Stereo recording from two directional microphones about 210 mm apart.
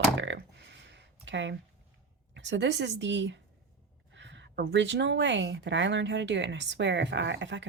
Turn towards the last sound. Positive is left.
turn(degrees=-60)  # may be behind; listen again after turning